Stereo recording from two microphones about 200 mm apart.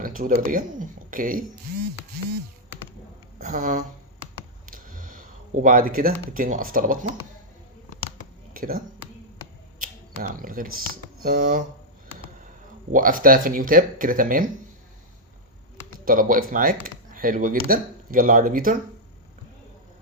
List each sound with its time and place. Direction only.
0.0 s a sound: 45° right (ahead or behind)
0.4 s speech: 40° right (ahead or behind)
3.4 s speech: 40° right (ahead or behind)
4.6 s a sound: 45° right (ahead or behind)
5.6 s speech: 45° right (ahead or behind)
8.5 s speech: 45° right (ahead or behind)
9.8 s a sound: 40° right (ahead or behind)
11.2 s speech: 45° right (ahead or behind)
12.9 s speech: 45° right (ahead or behind)
16.0 s speech: 45° right (ahead or behind)